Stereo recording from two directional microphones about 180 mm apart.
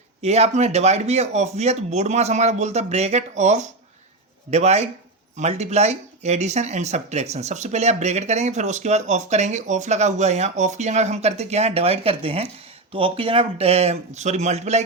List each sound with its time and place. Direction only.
0.2 s speech: 35° right (ahead or behind)